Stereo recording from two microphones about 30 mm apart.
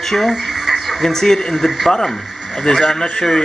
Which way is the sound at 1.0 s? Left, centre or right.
Centre.